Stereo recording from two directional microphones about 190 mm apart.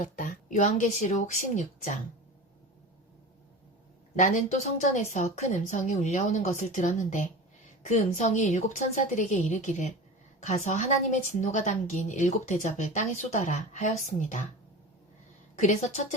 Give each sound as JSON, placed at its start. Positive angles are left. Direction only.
{"t": 0.0, "sound": "a woman's voice", "side_deg": 45}
{"t": 4.1, "sound": "a woman's voice", "side_deg": 40}
{"t": 15.5, "sound": "a woman's voice", "side_deg": 40}